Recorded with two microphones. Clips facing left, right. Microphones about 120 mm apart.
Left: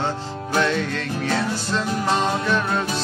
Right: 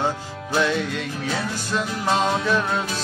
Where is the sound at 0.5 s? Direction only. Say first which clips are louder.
Even; 10° right (ahead or behind).